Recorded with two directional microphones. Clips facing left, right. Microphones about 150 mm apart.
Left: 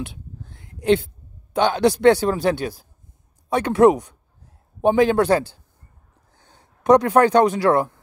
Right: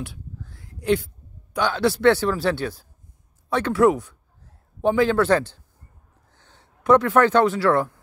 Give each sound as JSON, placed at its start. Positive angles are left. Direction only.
{"t": 0.0, "sound": "a man's voice", "side_deg": 20}